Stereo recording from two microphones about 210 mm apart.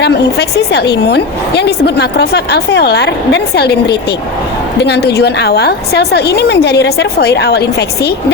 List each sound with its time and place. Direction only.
0.0 s a woman's voice: 50° left (ahead or behind)